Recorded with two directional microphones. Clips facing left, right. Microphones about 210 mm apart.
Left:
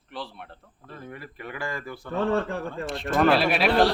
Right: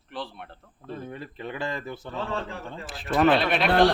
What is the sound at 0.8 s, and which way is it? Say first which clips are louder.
Speech: right 4 dB; 25° right (ahead or behind).